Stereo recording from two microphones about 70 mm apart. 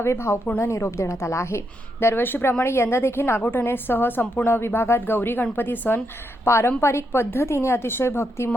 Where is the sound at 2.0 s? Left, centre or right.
Left.